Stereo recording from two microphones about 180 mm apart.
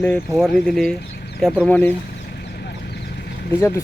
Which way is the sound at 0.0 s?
5° left (ahead or behind).